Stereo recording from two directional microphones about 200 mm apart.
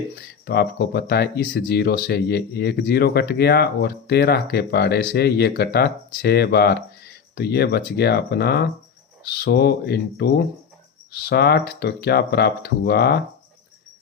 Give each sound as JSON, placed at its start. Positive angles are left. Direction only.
{"t": 0.4, "sound": "speech", "side_deg": 55}